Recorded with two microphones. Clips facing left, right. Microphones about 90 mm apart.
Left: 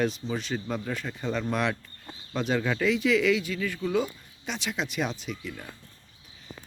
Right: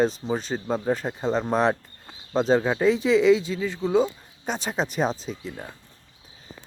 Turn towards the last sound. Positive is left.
turn(degrees=-35)  # may be behind; listen again after turning